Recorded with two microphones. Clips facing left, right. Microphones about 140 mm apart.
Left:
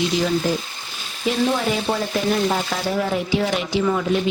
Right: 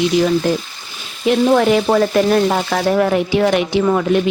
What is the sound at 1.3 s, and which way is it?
Frying, 70° right (ahead or behind).